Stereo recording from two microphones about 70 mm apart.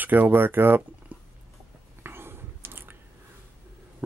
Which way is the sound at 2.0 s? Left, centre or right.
Right.